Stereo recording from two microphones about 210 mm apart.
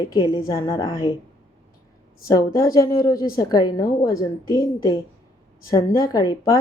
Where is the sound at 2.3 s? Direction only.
15° left (ahead or behind).